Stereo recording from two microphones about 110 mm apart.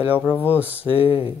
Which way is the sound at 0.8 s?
60° left (ahead or behind).